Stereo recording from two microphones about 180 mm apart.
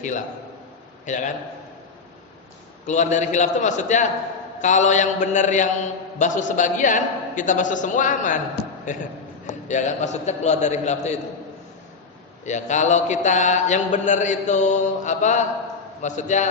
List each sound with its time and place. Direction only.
1.0 s a man's voice: 45° left (ahead or behind)
2.8 s a man's voice: 40° left (ahead or behind)
12.5 s a man's voice: 40° left (ahead or behind)